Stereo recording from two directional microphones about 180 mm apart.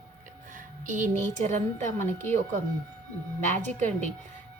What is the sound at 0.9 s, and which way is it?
A woman's voice, 45° right (ahead or behind).